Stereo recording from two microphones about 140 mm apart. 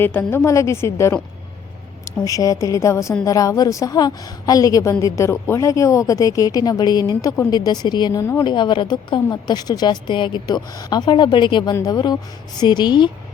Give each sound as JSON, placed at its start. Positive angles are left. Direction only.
{"t": 0.0, "sound": "a woman's voice", "side_deg": 15}
{"t": 8.2, "sound": "a woman's voice", "side_deg": 20}
{"t": 8.4, "sound": "a woman's voice", "side_deg": 35}